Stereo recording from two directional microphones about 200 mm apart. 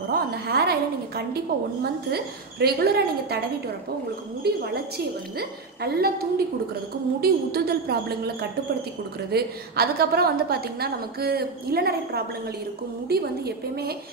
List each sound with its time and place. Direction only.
0.1 s a woman's voice: 50° right (ahead or behind)